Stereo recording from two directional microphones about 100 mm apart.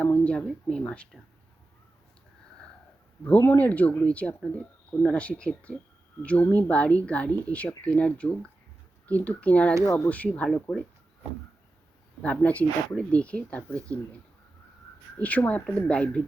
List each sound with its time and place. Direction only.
0.0 s speech: 10° left (ahead or behind)
3.2 s speech: 20° left (ahead or behind)
9.8 s speech: 30° left (ahead or behind)
10.1 s speech: 15° left (ahead or behind)
12.2 s speech: 15° left (ahead or behind)
15.2 s speech: 15° left (ahead or behind)